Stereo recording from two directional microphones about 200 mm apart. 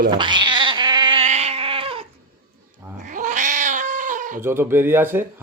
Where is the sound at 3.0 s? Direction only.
40° right (ahead or behind).